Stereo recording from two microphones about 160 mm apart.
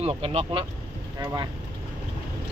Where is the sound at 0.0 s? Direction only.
40° right (ahead or behind).